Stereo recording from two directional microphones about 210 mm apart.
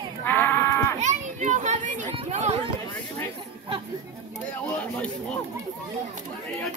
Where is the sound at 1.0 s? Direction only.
35° right (ahead or behind).